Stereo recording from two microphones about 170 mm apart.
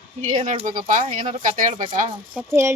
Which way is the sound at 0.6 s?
50° right (ahead or behind).